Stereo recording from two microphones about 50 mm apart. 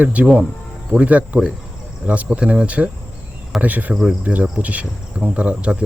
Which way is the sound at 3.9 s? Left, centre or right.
Centre.